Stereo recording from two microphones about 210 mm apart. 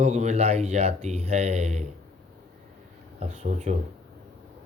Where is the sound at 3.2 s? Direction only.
35° right (ahead or behind).